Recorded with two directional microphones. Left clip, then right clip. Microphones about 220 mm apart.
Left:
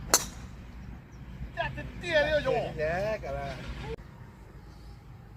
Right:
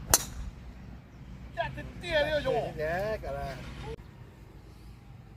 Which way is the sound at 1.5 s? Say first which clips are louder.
Left 1 dB; centre (ahead or behind).